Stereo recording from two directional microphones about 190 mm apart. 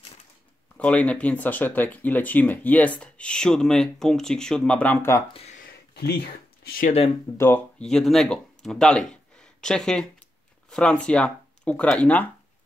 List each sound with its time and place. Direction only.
0.7 s speech: 5° left (ahead or behind)
5.6 s a sound: 60° left (ahead or behind)
7.3 s speech: 10° left (ahead or behind)